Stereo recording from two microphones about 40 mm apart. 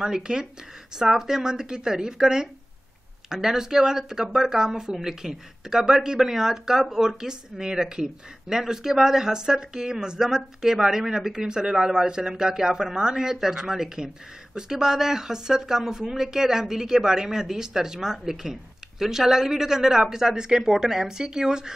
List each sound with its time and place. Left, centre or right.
0.0 s speech: centre